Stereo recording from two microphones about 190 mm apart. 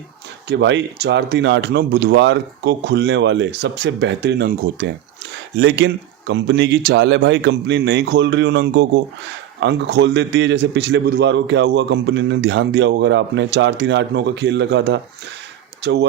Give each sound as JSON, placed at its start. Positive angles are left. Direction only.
{"t": 0.4, "sound": "a man's voice", "side_deg": -70}